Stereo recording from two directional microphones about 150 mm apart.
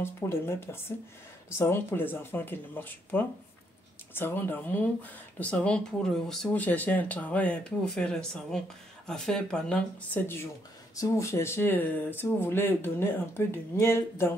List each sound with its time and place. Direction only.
0.0 s speech: 15° left (ahead or behind)